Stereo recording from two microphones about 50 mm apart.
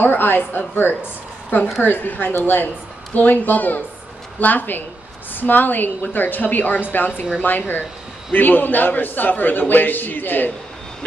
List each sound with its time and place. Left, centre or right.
0.0 s a man's voice: left